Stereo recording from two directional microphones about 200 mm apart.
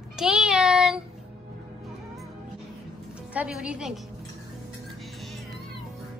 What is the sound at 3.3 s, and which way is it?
Speech, 5° right (ahead or behind).